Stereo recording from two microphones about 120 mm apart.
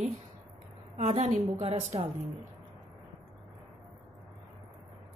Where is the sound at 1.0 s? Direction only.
65° right (ahead or behind).